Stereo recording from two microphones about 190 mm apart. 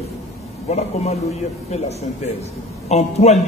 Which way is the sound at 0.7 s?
35° left (ahead or behind).